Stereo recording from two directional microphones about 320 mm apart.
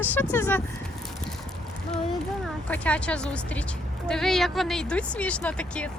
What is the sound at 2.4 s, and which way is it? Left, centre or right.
A woman's voice, centre.